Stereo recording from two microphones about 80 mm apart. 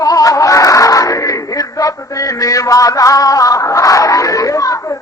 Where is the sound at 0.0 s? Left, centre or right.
Left.